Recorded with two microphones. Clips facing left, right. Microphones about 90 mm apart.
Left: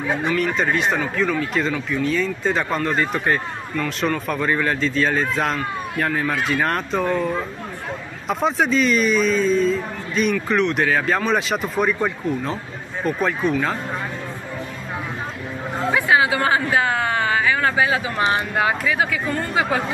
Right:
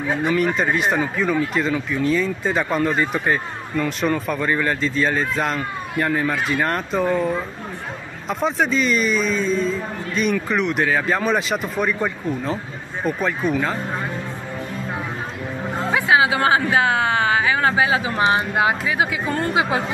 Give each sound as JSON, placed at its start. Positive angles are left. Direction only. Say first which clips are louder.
{"t": 0.2, "sound": "speech", "louder": "right 4 dB", "side_deg": -5}
{"t": 15.9, "sound": "speech", "louder": "right 1 dB", "side_deg": -20}